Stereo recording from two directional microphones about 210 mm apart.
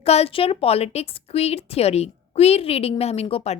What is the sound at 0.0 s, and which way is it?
A woman's voice, 30° left (ahead or behind).